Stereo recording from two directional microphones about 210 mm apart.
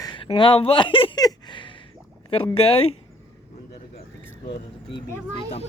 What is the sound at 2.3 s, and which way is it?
Speech, 25° left (ahead or behind).